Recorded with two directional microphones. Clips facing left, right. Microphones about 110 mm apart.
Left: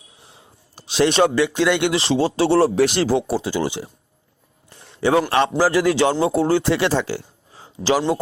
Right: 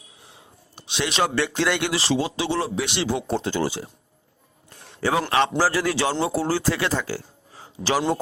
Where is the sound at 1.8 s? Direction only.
25° left (ahead or behind).